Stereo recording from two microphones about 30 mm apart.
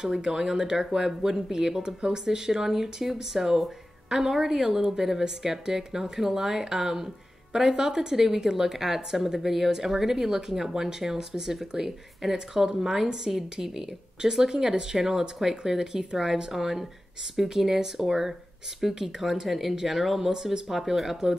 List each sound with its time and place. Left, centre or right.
0.0 s a woman's voice: right
1.8 s a woman's voice: right
7.7 s a woman's voice: right; by 21.2 s centre